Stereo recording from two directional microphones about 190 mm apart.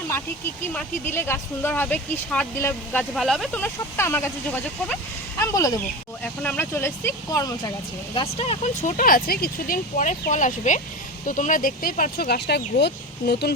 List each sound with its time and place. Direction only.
0.1 s speech: 10° left (ahead or behind); by 13.5 s 60° left (ahead or behind)